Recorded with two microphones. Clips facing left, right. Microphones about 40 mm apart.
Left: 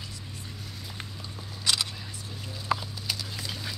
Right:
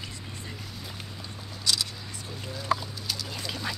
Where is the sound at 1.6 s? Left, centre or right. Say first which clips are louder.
Left 1 dB; left.